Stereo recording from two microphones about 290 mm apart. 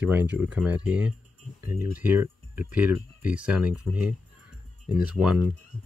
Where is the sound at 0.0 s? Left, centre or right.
Centre.